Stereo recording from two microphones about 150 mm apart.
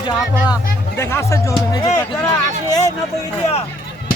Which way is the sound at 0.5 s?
15° left (ahead or behind).